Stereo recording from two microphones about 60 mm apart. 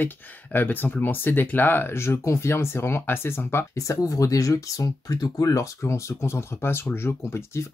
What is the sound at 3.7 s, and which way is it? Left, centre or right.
Speech, left.